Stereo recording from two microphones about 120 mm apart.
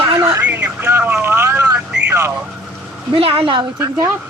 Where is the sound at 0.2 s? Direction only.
25° right (ahead or behind).